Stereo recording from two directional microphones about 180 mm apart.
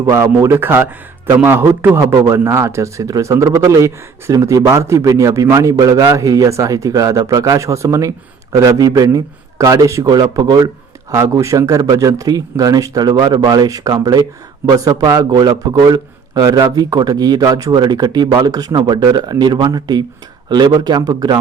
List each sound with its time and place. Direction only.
0.0 s a man's voice: 15° right (ahead or behind)